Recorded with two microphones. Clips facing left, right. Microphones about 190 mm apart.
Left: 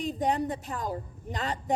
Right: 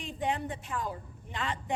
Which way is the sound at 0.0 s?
40° left (ahead or behind).